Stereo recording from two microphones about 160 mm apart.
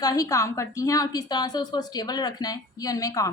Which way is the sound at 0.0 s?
20° left (ahead or behind).